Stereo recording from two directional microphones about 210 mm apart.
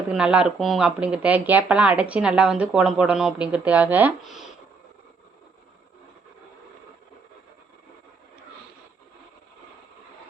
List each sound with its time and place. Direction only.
0.1 s speech: 5° right (ahead or behind)